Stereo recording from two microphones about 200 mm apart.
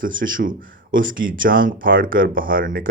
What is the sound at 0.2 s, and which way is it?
Speech, 45° right (ahead or behind).